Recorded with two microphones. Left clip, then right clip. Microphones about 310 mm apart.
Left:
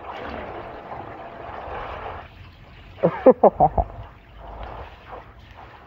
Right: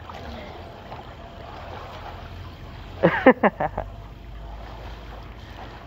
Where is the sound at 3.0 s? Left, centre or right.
Centre.